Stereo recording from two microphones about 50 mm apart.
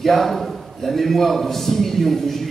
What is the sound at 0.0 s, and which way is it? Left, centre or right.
A man's voice, centre.